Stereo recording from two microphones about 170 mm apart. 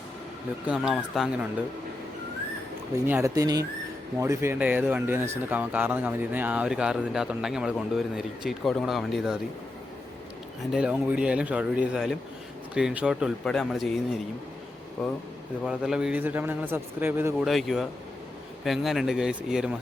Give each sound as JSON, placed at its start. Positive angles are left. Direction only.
{"t": 0.7, "sound": "speech", "side_deg": -5}
{"t": 3.1, "sound": "speech", "side_deg": -15}
{"t": 10.7, "sound": "speech", "side_deg": -5}
{"t": 15.6, "sound": "speech", "side_deg": -5}
{"t": 17.4, "sound": "speech", "side_deg": 0}